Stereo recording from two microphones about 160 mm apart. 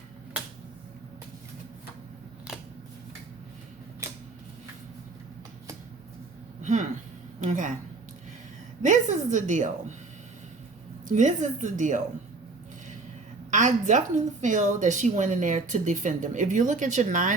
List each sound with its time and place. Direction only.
6.6 s a sound: 50° right (ahead or behind)
7.4 s speech: 50° right (ahead or behind)
8.8 s speech: 50° right (ahead or behind)
11.1 s speech: 50° right (ahead or behind)
13.5 s a woman's voice: 50° right (ahead or behind)